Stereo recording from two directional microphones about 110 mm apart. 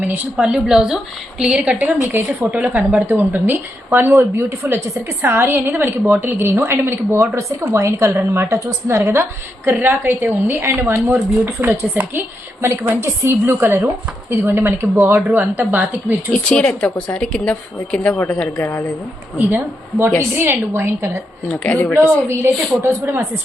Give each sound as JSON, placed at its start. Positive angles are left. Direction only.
{"t": 0.1, "sound": "a woman's voice", "side_deg": -10}
{"t": 2.0, "sound": "a woman's voice", "side_deg": -20}
{"t": 15.3, "sound": "a woman's voice", "side_deg": -15}
{"t": 16.3, "sound": "a woman's voice", "side_deg": 5}
{"t": 19.4, "sound": "a woman's voice", "side_deg": -15}
{"t": 21.4, "sound": "a woman's voice", "side_deg": 5}
{"t": 21.9, "sound": "a woman's voice", "side_deg": -25}